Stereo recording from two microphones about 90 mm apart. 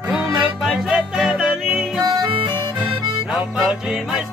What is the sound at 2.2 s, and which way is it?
Accordion, 60° right (ahead or behind).